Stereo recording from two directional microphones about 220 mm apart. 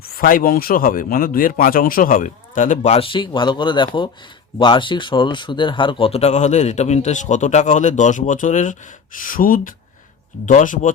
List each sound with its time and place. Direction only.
0.0 s speech: 45° left (ahead or behind)